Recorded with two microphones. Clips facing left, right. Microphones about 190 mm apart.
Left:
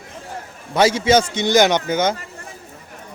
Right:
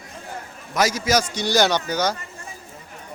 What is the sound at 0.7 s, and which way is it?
A man's voice, 30° left (ahead or behind).